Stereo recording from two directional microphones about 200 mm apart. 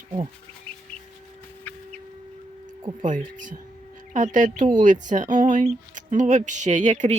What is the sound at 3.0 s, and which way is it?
Speech, 40° right (ahead or behind).